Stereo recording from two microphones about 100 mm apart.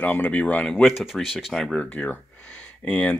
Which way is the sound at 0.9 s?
Centre (ahead or behind).